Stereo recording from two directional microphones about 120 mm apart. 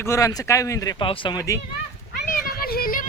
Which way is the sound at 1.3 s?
25° left (ahead or behind).